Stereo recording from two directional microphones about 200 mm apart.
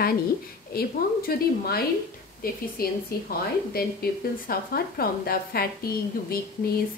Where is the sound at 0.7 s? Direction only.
50° left (ahead or behind).